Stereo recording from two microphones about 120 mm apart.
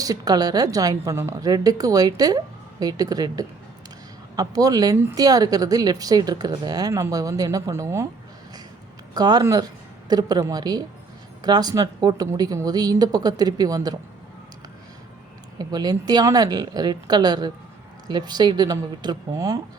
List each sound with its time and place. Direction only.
0.0 s speech: 30° right (ahead or behind)
1.5 s speech: 30° right (ahead or behind)
9.1 s speech: 35° right (ahead or behind)
15.5 s speech: 35° right (ahead or behind)